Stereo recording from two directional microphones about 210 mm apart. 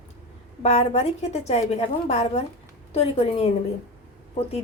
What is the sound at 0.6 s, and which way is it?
A woman's voice, 30° left (ahead or behind).